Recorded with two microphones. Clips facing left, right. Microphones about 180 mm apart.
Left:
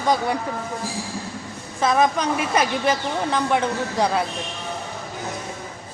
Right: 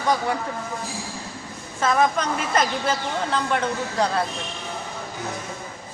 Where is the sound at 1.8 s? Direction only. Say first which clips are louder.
Left 1 dB; 10° left (ahead or behind).